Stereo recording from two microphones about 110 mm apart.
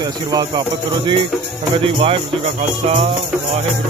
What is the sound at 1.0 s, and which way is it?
Speech, 50° right (ahead or behind).